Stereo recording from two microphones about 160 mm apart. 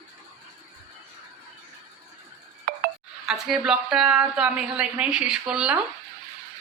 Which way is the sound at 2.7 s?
70° right (ahead or behind).